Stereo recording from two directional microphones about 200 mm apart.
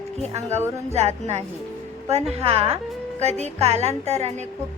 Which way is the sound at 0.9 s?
35° right (ahead or behind).